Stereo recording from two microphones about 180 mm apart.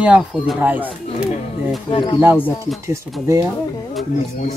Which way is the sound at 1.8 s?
30° left (ahead or behind).